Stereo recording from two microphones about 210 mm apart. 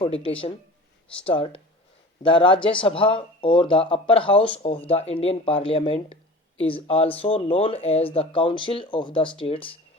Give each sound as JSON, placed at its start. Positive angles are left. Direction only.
{"t": 0.0, "sound": "speech", "side_deg": 25}